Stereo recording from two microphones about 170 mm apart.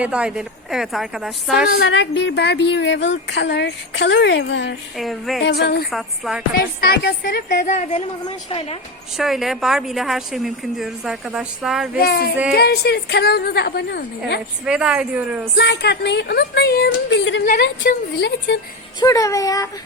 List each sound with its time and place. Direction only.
0.0 s a woman's voice: 5° right (ahead or behind)
1.7 s speech: 80° left
4.9 s a woman's voice: centre (ahead or behind)
5.4 s a woman's voice: 75° left (ahead or behind)
5.9 s a woman's voice: centre (ahead or behind)
6.5 s a woman's voice: 60° left (ahead or behind); by 8.8 s 35° left (ahead or behind)
9.1 s a woman's voice: centre (ahead or behind)
11.9 s a woman's voice: 65° left (ahead or behind)
14.6 s a woman's voice: 5° right (ahead or behind)
15.5 s speech: 85° left
17.6 s speech: 80° left
18.9 s speech: 20° left (ahead or behind)